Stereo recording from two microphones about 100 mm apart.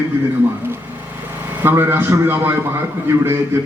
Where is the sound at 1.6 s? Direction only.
20° right (ahead or behind).